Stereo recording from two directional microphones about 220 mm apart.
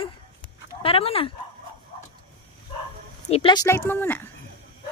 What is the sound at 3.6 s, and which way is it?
Speech, 10° left (ahead or behind).